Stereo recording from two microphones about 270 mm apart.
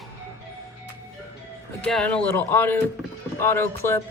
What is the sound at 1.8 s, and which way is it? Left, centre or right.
Speech, centre.